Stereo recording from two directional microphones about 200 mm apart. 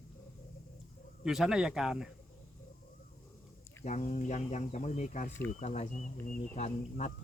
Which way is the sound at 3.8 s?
35° left (ahead or behind).